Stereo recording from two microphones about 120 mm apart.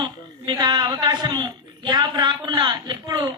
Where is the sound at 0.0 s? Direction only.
40° right (ahead or behind).